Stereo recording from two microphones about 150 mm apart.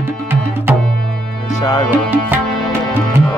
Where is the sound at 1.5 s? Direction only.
25° left (ahead or behind).